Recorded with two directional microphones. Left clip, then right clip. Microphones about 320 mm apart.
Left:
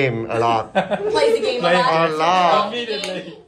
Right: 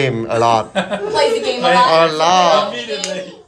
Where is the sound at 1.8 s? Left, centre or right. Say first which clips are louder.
Right 5 dB; centre.